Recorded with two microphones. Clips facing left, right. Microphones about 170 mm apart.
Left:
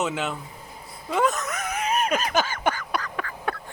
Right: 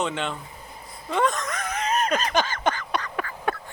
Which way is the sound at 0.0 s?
5° left (ahead or behind).